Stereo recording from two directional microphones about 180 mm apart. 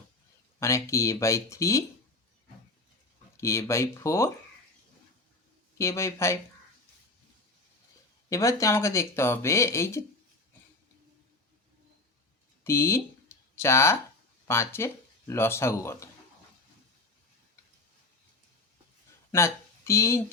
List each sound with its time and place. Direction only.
0.6 s speech: 15° left (ahead or behind)
3.3 s speech: 15° left (ahead or behind)
5.7 s speech: 15° left (ahead or behind)
8.3 s speech: 15° left (ahead or behind)
12.6 s speech: 15° left (ahead or behind)
19.3 s speech: 15° left (ahead or behind)